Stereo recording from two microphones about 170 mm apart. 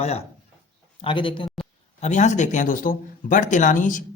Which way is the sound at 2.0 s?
45° left (ahead or behind).